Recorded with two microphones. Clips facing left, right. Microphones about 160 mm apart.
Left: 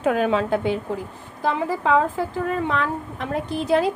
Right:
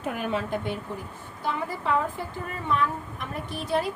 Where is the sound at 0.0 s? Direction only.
90° left.